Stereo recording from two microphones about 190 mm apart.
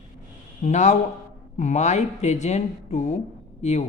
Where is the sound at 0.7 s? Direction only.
40° left (ahead or behind).